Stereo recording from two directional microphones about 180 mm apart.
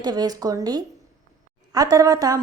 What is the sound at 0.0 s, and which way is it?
A woman's voice, 20° right (ahead or behind).